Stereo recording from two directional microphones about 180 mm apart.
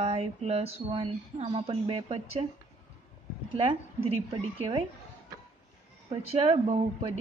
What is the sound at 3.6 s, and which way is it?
Speech, 30° right (ahead or behind).